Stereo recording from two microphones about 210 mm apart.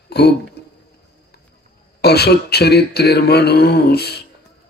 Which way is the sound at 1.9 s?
50° left (ahead or behind).